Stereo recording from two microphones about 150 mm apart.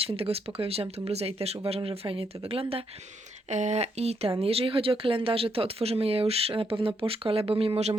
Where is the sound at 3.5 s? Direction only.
50° right (ahead or behind).